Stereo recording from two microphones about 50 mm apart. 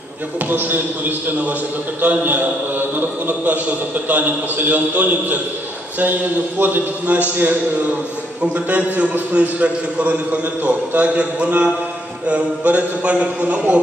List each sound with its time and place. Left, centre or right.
0.5 s a man's voice: right